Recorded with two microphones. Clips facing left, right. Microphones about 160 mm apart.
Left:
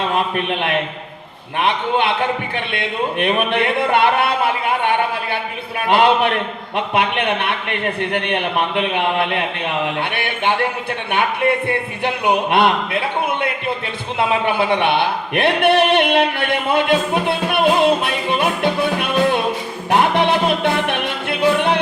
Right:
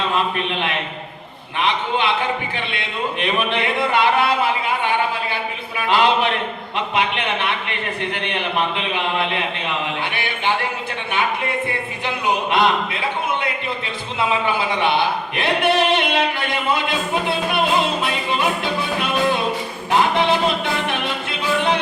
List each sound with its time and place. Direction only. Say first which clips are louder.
0.3 s speech: left 4 dB; 55° left (ahead or behind)
19.9 s music: left 2 dB; 60° left (ahead or behind)